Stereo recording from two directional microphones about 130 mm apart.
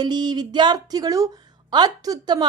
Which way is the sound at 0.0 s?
35° right (ahead or behind).